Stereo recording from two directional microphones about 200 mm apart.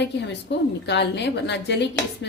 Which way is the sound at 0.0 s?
60° left (ahead or behind).